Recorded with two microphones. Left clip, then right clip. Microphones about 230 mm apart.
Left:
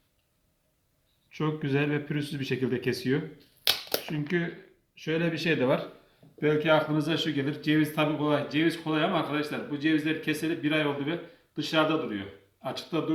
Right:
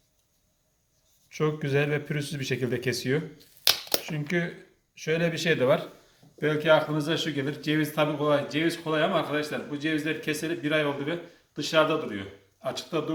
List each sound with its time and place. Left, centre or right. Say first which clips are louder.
1.3 s speech: right 3 dB; right
4.9 s speech: right 2 dB; right
6.4 s speech: right 2 dB; right